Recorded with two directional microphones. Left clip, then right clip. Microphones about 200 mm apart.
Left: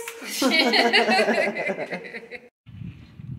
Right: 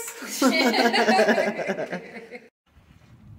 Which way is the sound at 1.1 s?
10° right (ahead or behind).